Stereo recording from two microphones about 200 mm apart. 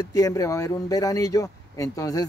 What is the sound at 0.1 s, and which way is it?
Speech, 15° left (ahead or behind).